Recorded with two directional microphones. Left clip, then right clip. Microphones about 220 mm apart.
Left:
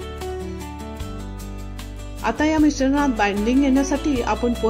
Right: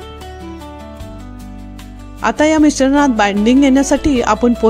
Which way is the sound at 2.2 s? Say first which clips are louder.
Right 7 dB; 40° right (ahead or behind).